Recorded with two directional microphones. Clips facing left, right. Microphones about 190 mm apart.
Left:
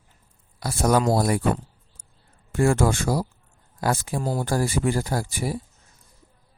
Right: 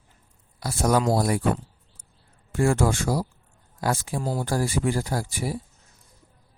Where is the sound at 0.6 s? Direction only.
60° left (ahead or behind).